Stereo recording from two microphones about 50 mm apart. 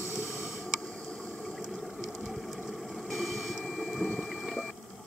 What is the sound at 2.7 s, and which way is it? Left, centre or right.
Vehicle, centre.